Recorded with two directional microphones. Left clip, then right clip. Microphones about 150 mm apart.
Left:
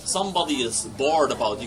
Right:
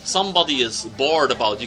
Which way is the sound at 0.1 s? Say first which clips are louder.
Right 5 dB; 35° right (ahead or behind).